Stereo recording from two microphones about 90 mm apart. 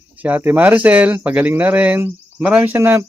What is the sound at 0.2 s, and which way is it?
Speech, 20° right (ahead or behind).